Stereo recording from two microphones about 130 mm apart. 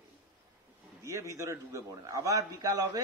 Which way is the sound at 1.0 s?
25° right (ahead or behind).